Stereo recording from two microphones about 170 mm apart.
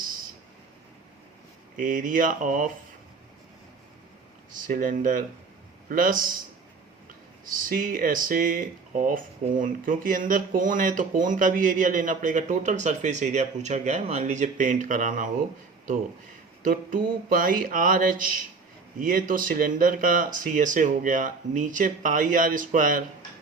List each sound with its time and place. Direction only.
1.8 s speech: 50° right (ahead or behind)
4.5 s speech: 50° right (ahead or behind)
7.4 s speech: 55° right (ahead or behind)
16.6 s speech: 55° right (ahead or behind)